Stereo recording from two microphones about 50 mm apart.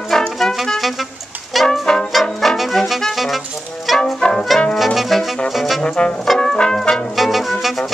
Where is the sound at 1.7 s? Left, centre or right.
Centre.